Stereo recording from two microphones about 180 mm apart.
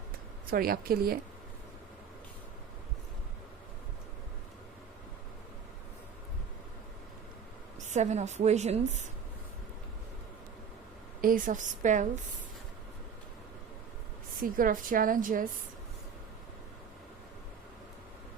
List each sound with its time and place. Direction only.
0.5 s a woman's voice: 55° right (ahead or behind)
7.9 s a woman's voice: 40° right (ahead or behind)
11.2 s a woman's voice: 50° right (ahead or behind)
14.4 s a woman's voice: 50° right (ahead or behind)